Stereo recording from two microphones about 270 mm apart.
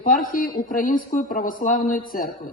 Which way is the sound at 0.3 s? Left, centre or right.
Left.